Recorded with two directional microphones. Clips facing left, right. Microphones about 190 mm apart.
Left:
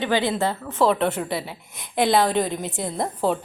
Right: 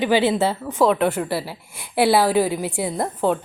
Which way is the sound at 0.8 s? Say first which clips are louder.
Right 2 dB; centre (ahead or behind).